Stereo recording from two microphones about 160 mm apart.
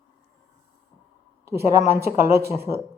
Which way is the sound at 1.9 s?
75° right (ahead or behind).